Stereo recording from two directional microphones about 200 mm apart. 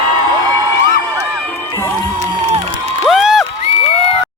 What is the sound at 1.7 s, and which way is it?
Music, 10° left (ahead or behind).